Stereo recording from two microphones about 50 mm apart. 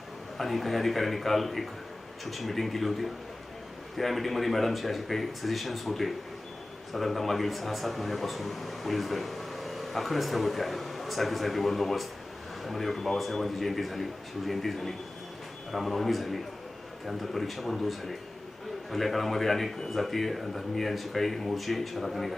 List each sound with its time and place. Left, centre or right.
0.3 s speech: centre